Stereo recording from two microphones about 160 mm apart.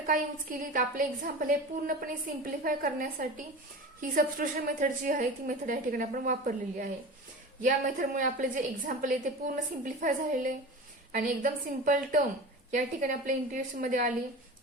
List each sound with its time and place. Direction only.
0.1 s a woman's voice: 60° right (ahead or behind)